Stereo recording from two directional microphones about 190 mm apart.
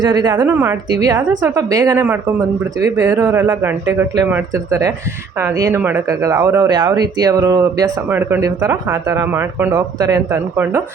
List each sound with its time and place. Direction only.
0.0 s a woman's voice: 20° right (ahead or behind)
0.5 s speech: 10° right (ahead or behind)